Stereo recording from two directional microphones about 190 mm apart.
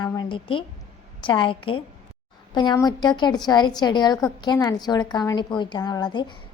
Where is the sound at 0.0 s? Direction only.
20° left (ahead or behind).